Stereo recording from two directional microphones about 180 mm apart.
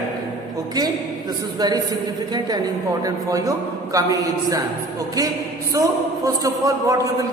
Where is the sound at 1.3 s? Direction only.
20° right (ahead or behind).